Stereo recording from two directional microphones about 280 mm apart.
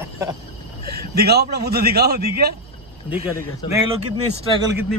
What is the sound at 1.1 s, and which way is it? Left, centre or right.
A man's voice, right.